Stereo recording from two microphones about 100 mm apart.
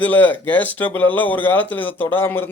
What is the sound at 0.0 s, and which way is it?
Speech, 15° left (ahead or behind).